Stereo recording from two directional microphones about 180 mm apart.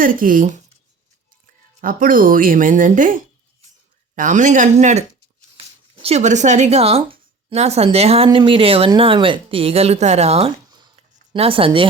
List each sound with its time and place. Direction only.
0.0 s speech: 50° right (ahead or behind)
1.8 s speech: 50° right (ahead or behind)
10.7 s a sound: 30° right (ahead or behind)